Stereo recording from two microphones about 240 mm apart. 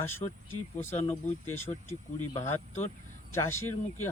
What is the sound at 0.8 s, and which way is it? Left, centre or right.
Speech, centre.